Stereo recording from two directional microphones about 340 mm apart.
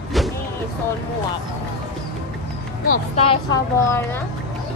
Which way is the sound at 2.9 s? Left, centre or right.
Centre.